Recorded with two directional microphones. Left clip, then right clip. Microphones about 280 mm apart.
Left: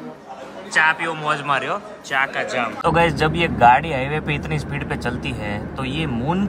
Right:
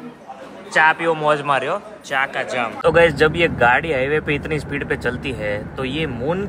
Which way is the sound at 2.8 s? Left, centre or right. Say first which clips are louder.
Right 5 dB; centre.